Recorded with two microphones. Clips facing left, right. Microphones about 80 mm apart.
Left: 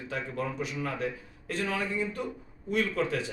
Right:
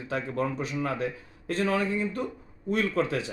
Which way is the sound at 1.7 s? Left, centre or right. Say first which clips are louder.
Right 4 dB; right.